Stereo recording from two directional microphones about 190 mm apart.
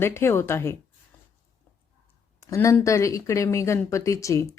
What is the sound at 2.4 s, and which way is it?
A woman's voice, 15° left (ahead or behind).